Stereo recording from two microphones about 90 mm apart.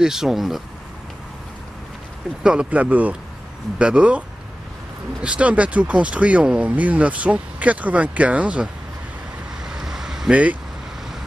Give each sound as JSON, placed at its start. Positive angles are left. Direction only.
{"t": 0.0, "sound": "speech", "side_deg": -5}
{"t": 2.4, "sound": "speech", "side_deg": -10}
{"t": 5.2, "sound": "speech", "side_deg": -15}
{"t": 9.7, "sound": "vehicle", "side_deg": -5}